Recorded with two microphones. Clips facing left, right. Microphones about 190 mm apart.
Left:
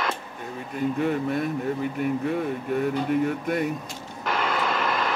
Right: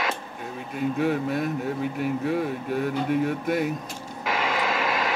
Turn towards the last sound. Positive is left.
turn(degrees=-10)  # may be behind; listen again after turning